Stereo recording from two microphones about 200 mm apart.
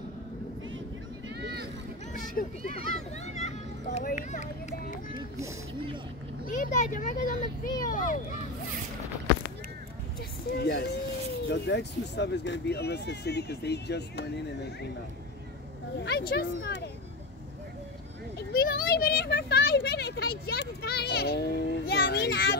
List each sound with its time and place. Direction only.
2.1 s a sound: 45° left (ahead or behind)
3.3 s a child's voice: 35° left (ahead or behind)
6.4 s speech: 40° left (ahead or behind)
10.5 s speech: 55° left (ahead or behind)
16.0 s speech: 55° left (ahead or behind)
18.5 s a child's voice: 50° left (ahead or behind)